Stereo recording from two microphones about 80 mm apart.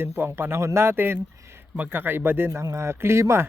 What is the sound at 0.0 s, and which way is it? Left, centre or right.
Speech, right.